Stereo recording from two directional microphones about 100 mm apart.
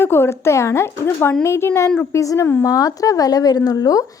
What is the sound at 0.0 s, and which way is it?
A woman's voice, 25° left (ahead or behind).